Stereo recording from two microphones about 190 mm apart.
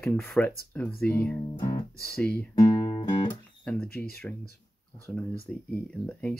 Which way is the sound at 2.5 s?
25° left (ahead or behind).